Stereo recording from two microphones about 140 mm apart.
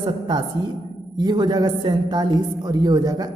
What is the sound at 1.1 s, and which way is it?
A woman's voice, 30° right (ahead or behind).